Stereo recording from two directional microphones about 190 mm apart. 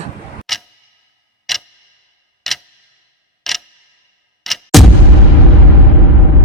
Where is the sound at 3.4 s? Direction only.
Centre (ahead or behind).